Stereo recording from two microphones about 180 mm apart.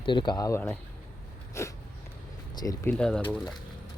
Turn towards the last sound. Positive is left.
turn(degrees=5)  # may be behind; listen again after turning